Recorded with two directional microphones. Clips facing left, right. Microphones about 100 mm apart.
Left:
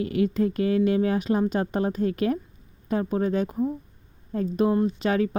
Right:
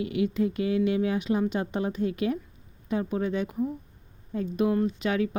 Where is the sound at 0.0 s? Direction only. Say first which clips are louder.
Left 3 dB; 45° left (ahead or behind).